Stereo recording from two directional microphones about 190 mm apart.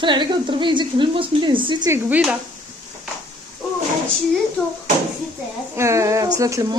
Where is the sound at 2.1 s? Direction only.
5° right (ahead or behind).